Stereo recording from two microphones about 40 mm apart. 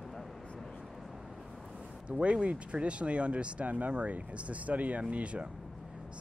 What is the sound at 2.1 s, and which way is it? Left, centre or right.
Speech, right.